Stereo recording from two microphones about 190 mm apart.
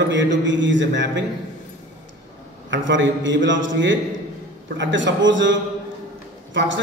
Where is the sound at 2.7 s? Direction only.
75° right (ahead or behind).